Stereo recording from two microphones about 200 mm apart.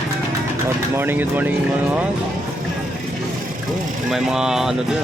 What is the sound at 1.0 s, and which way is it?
Speech, 10° right (ahead or behind).